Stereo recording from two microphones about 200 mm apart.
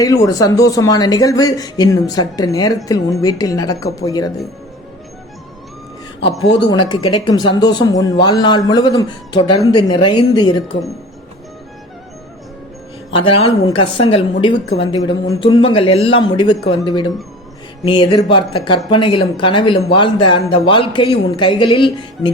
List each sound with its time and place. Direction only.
0.0 s speech: 15° left (ahead or behind)
6.7 s speech: 20° left (ahead or behind)
13.1 s speech: 25° left (ahead or behind)